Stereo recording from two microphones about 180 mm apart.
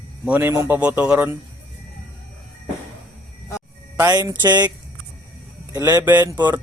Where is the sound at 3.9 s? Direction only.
20° right (ahead or behind).